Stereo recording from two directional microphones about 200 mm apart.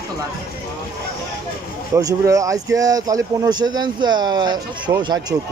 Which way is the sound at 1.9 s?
15° right (ahead or behind).